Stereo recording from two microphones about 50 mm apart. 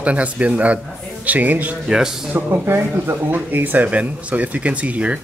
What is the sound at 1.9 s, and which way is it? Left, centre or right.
Speech, centre.